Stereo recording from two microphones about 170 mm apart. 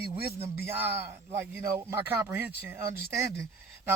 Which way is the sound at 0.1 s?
35° right (ahead or behind).